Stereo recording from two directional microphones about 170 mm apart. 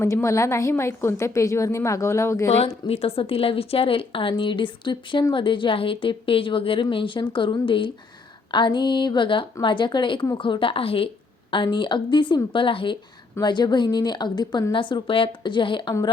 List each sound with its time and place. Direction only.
0.0 s a woman's voice: 15° left (ahead or behind)
2.6 s a woman's voice: 35° left (ahead or behind)